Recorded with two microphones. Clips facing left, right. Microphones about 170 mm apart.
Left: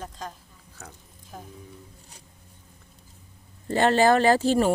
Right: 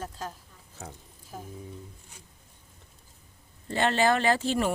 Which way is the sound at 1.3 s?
5° right (ahead or behind).